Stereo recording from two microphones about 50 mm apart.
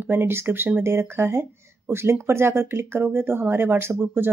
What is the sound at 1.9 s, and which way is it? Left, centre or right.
Speech, right.